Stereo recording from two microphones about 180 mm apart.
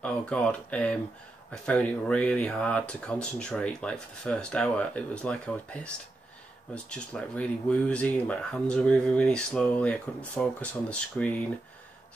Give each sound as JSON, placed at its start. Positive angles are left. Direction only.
{"t": 0.0, "sound": "speech", "side_deg": 5}